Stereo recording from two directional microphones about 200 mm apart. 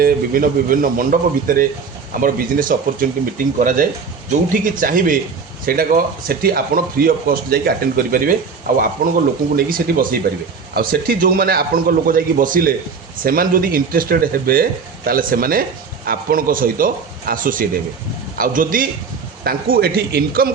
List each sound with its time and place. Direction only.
0.0 s speech: 45° right (ahead or behind)